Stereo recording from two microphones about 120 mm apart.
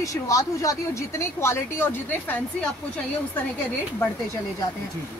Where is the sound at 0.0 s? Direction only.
30° left (ahead or behind).